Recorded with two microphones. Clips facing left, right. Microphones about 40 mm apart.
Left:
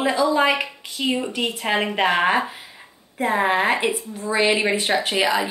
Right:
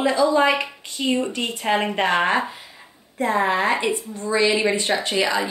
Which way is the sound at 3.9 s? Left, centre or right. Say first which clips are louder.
Even; centre.